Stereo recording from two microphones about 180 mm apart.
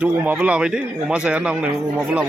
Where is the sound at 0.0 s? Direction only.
10° right (ahead or behind).